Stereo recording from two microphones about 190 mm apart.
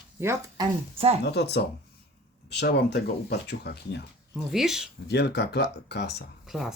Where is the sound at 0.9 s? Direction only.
30° right (ahead or behind).